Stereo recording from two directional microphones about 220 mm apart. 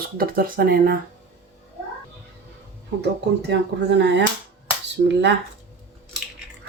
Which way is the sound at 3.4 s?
50° right (ahead or behind).